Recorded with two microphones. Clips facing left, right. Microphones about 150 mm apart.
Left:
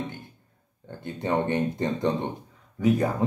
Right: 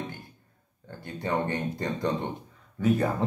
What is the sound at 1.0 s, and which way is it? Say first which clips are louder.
Speech: left 3 dB; 20° left (ahead or behind).